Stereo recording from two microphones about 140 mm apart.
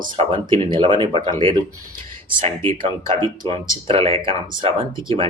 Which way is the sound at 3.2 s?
35° right (ahead or behind).